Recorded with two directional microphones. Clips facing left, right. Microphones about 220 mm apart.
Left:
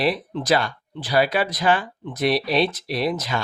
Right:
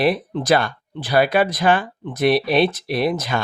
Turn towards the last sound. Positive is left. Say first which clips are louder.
# right 3 dB
turn(degrees=-55)  # may be behind; listen again after turning